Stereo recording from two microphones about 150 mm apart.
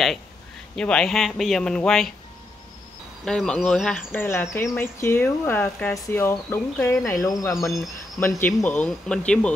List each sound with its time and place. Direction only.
0.7 s speech: 5° left (ahead or behind)
3.3 s speech: 5° left (ahead or behind)
7.1 s cricket: 20° left (ahead or behind)
8.2 s speech: 15° left (ahead or behind)